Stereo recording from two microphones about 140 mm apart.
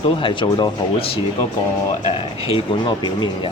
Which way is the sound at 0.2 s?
35° left (ahead or behind).